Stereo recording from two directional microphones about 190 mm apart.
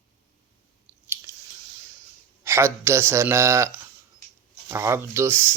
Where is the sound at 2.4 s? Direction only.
15° right (ahead or behind).